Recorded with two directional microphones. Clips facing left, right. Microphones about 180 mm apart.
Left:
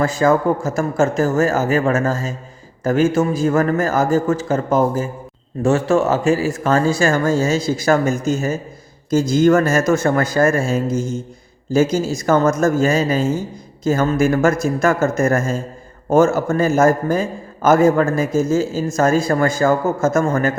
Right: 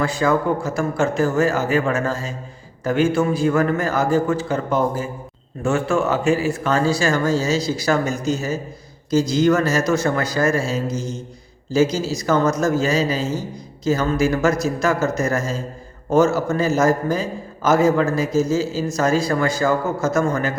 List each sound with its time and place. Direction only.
0.0 s a man's voice: 45° left (ahead or behind)